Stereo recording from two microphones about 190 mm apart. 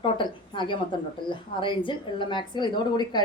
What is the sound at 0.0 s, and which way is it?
A woman's voice, 25° left (ahead or behind).